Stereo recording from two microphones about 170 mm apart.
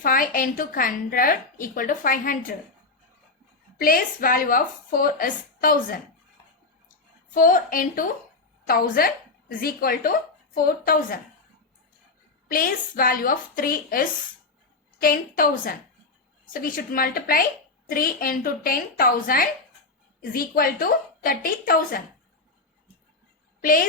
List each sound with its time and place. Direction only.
0.0 s a woman's voice: 55° left (ahead or behind)
3.8 s speech: 55° left (ahead or behind)
7.3 s a woman's voice: 55° left (ahead or behind)
12.5 s speech: 55° left (ahead or behind)